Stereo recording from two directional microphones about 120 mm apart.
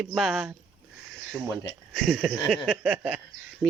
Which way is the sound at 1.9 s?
Centre (ahead or behind).